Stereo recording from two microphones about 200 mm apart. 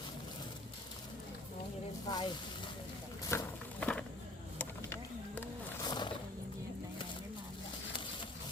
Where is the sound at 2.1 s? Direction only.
20° left (ahead or behind).